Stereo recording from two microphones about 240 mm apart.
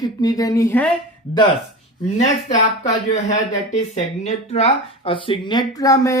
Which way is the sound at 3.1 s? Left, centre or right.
Left.